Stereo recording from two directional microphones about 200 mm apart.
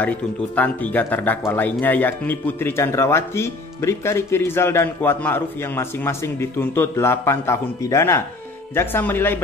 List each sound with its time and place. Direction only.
0.6 s speech: 10° left (ahead or behind)